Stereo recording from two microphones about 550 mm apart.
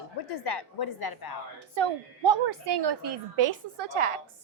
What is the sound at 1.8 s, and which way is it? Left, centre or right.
A woman's voice, right.